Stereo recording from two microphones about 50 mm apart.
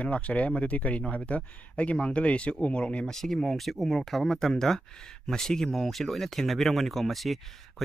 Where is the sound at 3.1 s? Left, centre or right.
Centre.